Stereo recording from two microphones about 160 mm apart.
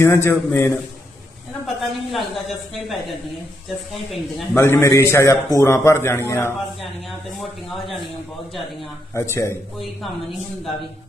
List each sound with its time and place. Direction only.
0.0 s a man's voice: 15° left (ahead or behind)
1.6 s a woman's voice: centre (ahead or behind)
4.5 s a man's voice: 15° left (ahead or behind)
7.7 s a woman's voice: centre (ahead or behind)
9.3 s a man's voice: 15° left (ahead or behind)